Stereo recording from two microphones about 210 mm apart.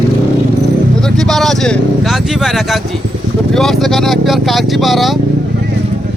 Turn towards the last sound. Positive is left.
turn(degrees=0)  # may be behind; listen again after turning